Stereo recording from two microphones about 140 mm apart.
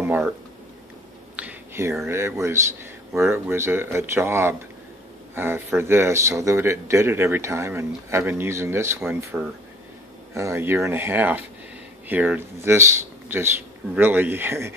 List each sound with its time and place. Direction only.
1.3 s a sound: 10° right (ahead or behind)
2.0 s speech: 20° right (ahead or behind)
13.9 s speech: 15° right (ahead or behind)